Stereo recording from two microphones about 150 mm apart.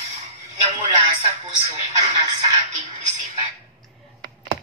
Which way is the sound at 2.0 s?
25° right (ahead or behind).